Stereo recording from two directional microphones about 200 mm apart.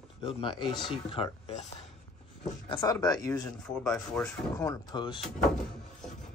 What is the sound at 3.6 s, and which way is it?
Speech, 5° left (ahead or behind).